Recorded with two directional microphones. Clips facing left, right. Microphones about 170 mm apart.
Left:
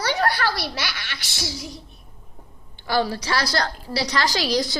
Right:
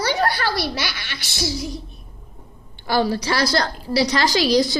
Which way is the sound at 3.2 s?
20° right (ahead or behind).